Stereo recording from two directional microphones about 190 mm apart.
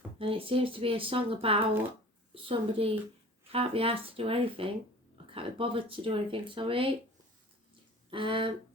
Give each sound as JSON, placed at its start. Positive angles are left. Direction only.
{"t": 0.2, "sound": "speech", "side_deg": -30}
{"t": 8.1, "sound": "speech", "side_deg": -25}